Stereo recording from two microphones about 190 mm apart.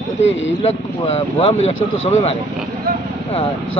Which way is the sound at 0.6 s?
35° left (ahead or behind).